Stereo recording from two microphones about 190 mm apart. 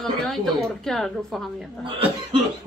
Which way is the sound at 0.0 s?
5° left (ahead or behind).